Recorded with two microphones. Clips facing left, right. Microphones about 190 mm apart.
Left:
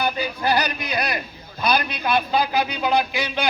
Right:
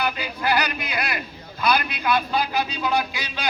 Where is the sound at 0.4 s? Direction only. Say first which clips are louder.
Even; 20° left (ahead or behind).